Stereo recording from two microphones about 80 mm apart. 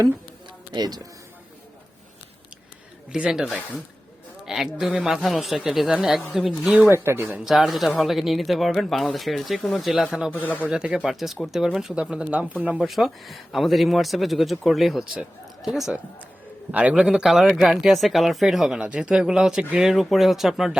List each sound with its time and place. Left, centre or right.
0.7 s speech: right
3.1 s speech: centre
6.9 s speech: right
7.4 s speech: centre
10.3 s speech: left
10.7 s speech: centre
11.1 s speech: centre
12.0 s speech: centre
12.9 s speech: centre